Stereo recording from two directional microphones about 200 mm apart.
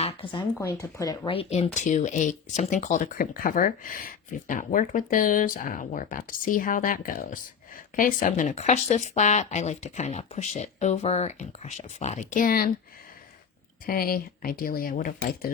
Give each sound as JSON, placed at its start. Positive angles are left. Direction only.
{"t": 0.0, "sound": "speech", "side_deg": 25}
{"t": 0.6, "sound": "speech", "side_deg": 15}
{"t": 13.8, "sound": "speech", "side_deg": 45}